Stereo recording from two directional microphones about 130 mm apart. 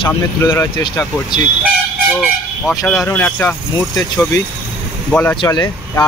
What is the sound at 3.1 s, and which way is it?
Speech, 15° left (ahead or behind).